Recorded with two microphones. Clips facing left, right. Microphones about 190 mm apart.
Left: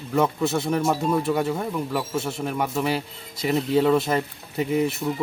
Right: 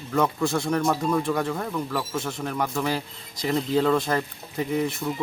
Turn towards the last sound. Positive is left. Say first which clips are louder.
# left 3 dB
turn(degrees=5)  # may be behind; listen again after turning